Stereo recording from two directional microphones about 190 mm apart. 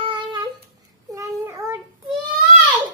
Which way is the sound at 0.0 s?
25° right (ahead or behind).